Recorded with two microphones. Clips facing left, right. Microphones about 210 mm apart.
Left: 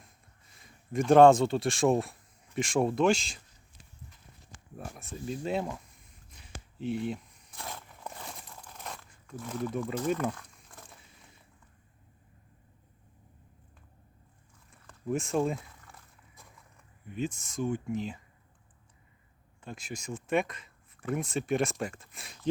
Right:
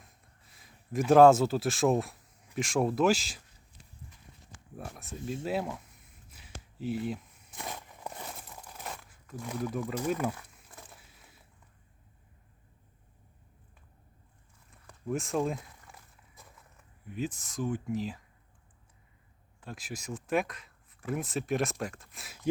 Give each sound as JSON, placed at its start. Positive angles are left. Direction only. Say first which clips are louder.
{"t": 0.5, "sound": "speech", "louder": "left 1 dB", "side_deg": -5}
{"t": 4.8, "sound": "speech", "louder": "even", "side_deg": 0}
{"t": 6.3, "sound": "a sound", "louder": "left 1 dB", "side_deg": -5}
{"t": 7.5, "sound": "a sound", "louder": "right 2 dB", "side_deg": -20}
{"t": 8.3, "sound": "a sound", "louder": "right 1 dB", "side_deg": -5}
{"t": 15.0, "sound": "speech", "louder": "left 2 dB", "side_deg": 0}
{"t": 16.4, "sound": "walk", "louder": "right 1 dB", "side_deg": 0}
{"t": 17.1, "sound": "speech", "louder": "left 1 dB", "side_deg": 0}
{"t": 19.6, "sound": "speech", "louder": "left 1 dB", "side_deg": 0}